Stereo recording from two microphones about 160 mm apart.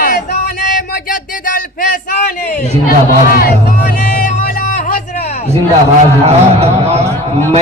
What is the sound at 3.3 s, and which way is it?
Speech, 70° left (ahead or behind).